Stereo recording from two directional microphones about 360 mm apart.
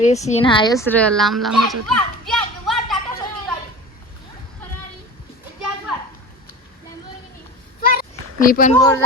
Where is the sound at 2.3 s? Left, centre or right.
Centre.